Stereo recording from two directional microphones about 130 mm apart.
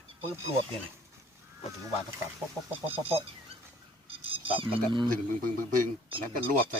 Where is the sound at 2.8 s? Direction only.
45° right (ahead or behind).